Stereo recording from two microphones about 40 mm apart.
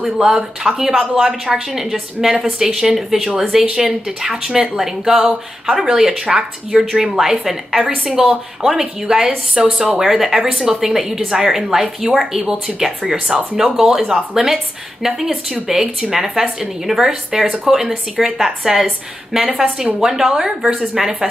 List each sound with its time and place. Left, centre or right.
0.0 s a woman's voice: centre
12.4 s speech: right
12.7 s a woman's voice: centre
20.1 s a woman's voice: centre